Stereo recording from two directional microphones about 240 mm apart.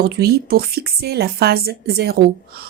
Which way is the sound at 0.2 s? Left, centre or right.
Right.